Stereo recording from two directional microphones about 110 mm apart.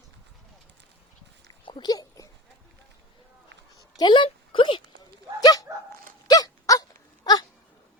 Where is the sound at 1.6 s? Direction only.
50° left (ahead or behind).